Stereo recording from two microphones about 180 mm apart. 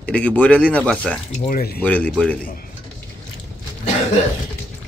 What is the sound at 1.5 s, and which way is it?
Speech, 55° left (ahead or behind).